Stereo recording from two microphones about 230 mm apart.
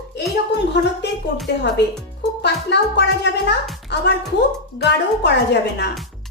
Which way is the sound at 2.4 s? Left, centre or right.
Left.